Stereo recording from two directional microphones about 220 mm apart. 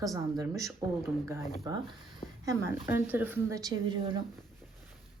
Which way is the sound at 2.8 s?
10° right (ahead or behind).